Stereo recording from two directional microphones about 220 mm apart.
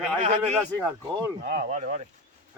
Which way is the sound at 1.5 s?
35° right (ahead or behind).